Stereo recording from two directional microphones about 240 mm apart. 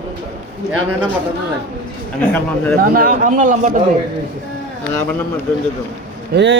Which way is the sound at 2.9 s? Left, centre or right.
Right.